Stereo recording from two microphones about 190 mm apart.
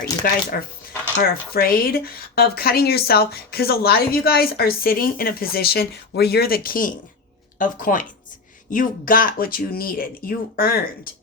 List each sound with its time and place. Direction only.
0.5 s speech: 50° left (ahead or behind)